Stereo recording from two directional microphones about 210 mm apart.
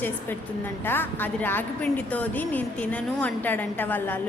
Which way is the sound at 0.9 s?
10° left (ahead or behind).